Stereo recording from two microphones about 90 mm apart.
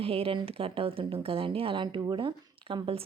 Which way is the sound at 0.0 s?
90° right.